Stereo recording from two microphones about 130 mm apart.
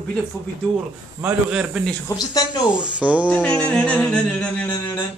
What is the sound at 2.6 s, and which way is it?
Speech, 5° right (ahead or behind).